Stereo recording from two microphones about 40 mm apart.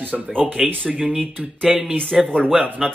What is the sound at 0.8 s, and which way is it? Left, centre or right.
Speech, right.